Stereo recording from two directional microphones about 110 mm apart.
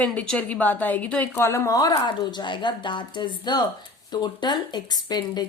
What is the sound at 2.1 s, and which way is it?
Speech, 45° left (ahead or behind).